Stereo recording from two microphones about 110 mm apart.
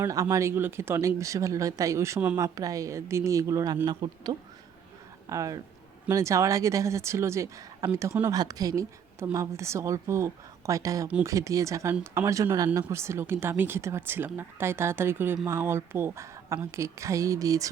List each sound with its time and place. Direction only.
0.1 s a woman's voice: 30° right (ahead or behind)
8.3 s a woman's voice: 35° right (ahead or behind)